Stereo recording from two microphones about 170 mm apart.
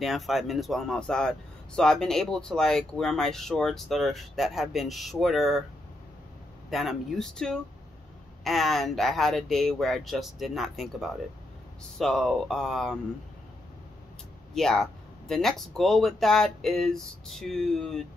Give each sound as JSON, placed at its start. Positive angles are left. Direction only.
{"t": 0.0, "sound": "speech", "side_deg": 0}
{"t": 6.7, "sound": "speech", "side_deg": 0}
{"t": 14.5, "sound": "speech", "side_deg": 0}